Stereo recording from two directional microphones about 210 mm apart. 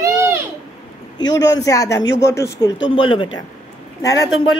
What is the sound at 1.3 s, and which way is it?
Speech, 15° left (ahead or behind).